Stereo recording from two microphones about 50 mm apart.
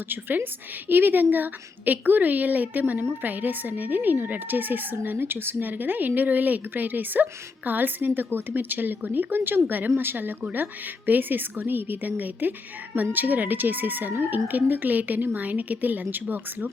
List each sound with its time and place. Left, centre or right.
0.1 s speech: right